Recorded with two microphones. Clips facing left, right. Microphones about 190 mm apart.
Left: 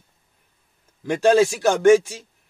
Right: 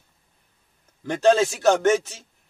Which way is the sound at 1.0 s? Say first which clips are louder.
Left 2 dB; 15° left (ahead or behind).